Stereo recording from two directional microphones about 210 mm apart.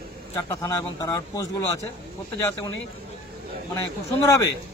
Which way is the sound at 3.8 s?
15° left (ahead or behind).